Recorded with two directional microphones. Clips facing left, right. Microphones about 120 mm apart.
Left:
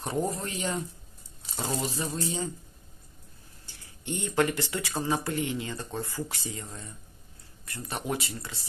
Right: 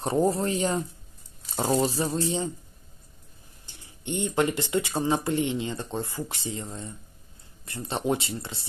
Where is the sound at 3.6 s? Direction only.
20° right (ahead or behind).